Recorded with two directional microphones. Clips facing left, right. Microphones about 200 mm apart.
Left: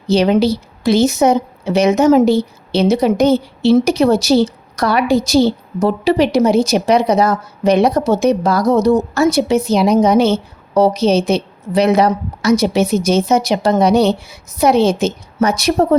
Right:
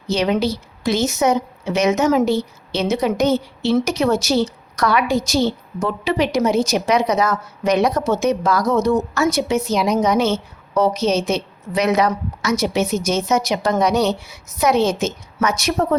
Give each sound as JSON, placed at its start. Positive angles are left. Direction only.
{"t": 0.1, "sound": "a woman's voice", "side_deg": 30}